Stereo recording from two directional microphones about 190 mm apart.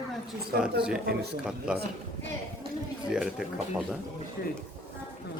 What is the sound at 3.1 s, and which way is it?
Speech, centre (ahead or behind).